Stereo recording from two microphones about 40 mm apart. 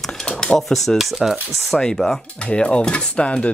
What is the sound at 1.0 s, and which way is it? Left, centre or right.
Speech, centre.